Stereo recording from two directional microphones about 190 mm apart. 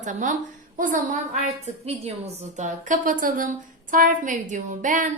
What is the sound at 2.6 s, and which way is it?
A woman's voice, 40° right (ahead or behind).